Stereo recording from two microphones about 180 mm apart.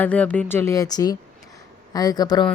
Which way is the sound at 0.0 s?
10° left (ahead or behind).